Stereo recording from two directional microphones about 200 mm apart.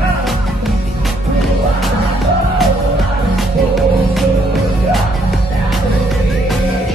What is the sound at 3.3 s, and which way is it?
Music, centre (ahead or behind).